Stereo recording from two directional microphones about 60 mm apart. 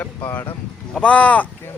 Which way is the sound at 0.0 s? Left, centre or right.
Left.